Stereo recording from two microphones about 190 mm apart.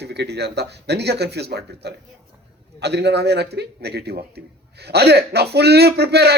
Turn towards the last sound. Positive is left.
turn(degrees=-60)  # may be behind; listen again after turning